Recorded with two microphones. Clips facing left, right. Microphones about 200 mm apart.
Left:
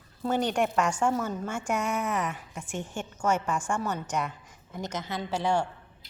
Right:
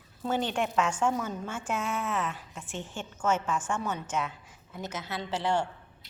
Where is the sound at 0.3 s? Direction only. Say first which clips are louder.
Left 2 dB; 10° left (ahead or behind).